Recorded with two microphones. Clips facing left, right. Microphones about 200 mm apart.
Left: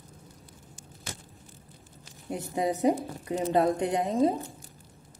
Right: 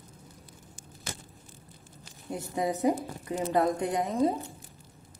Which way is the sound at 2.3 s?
20° left (ahead or behind).